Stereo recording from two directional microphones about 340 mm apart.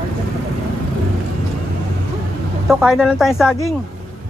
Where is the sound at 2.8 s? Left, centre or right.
Centre.